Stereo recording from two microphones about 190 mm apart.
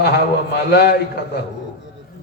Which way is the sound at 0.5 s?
60° left (ahead or behind).